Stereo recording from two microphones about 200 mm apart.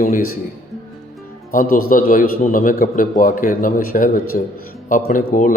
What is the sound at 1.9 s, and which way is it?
A man's voice, 45° left (ahead or behind).